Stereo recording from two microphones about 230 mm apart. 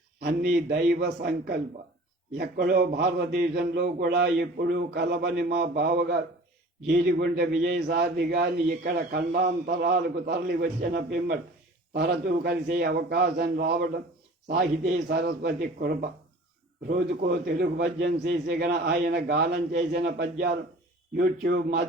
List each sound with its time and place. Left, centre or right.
0.2 s a man's voice: right
15.1 s a man's voice: right